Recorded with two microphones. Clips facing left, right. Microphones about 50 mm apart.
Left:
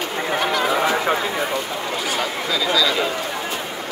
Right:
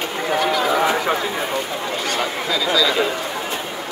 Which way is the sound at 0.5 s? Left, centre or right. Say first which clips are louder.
Right 1 dB; centre.